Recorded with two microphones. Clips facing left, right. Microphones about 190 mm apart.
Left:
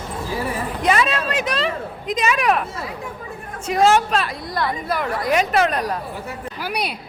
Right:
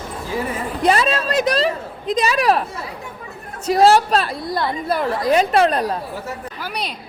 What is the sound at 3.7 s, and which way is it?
A woman's voice, 35° right (ahead or behind).